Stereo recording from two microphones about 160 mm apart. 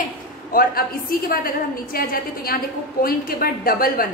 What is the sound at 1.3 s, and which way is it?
A woman's voice, 65° left (ahead or behind).